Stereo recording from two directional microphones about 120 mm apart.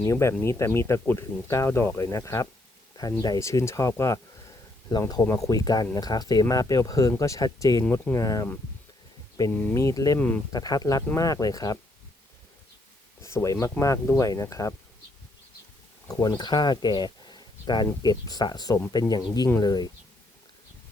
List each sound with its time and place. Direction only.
0.1 s speech: 25° left (ahead or behind)
4.9 s speech: 35° left (ahead or behind)
9.5 s speech: 15° left (ahead or behind)
9.7 s speech: 30° left (ahead or behind)
10.2 s speech: 15° left (ahead or behind)
10.5 s speech: 30° left (ahead or behind)
13.2 s speech: 25° left (ahead or behind)
16.0 s speech: 30° left (ahead or behind)